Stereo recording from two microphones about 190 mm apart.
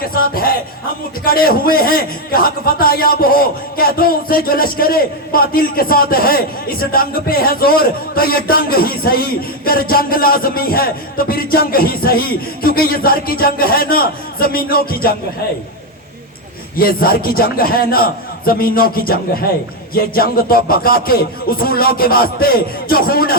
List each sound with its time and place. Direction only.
0.1 s a man's voice: 50° left (ahead or behind)
16.7 s a man's voice: 50° left (ahead or behind)